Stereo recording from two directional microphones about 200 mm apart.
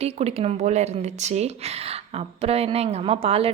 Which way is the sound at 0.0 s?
30° right (ahead or behind).